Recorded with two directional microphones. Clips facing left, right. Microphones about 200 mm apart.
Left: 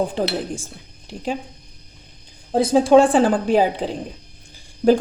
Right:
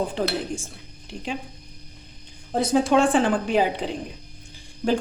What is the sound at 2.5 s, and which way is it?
A woman's voice, 30° left (ahead or behind).